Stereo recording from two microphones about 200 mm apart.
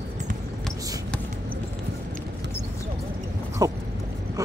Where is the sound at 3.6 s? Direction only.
15° right (ahead or behind).